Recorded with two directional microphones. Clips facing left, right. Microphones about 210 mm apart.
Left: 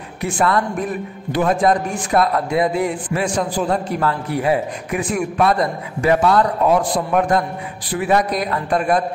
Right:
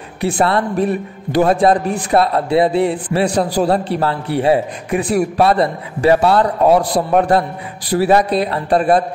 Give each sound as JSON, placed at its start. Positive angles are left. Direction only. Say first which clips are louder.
{"t": 0.4, "sound": "a man's voice", "louder": "right 3 dB", "side_deg": -30}